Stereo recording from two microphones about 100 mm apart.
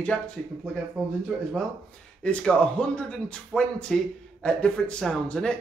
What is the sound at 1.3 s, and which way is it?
Speech, 10° right (ahead or behind).